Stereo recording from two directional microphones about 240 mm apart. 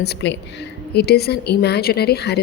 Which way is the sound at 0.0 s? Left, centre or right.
Left.